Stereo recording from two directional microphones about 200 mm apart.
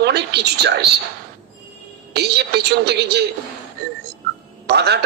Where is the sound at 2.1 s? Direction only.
55° right (ahead or behind).